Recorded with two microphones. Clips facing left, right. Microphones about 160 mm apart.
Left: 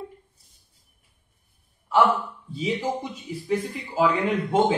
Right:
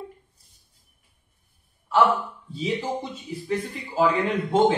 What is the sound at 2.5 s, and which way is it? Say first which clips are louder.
Speech: left 1 dB; 10° left (ahead or behind).